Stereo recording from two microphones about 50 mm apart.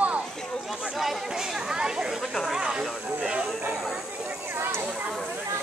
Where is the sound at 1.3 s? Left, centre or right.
Centre.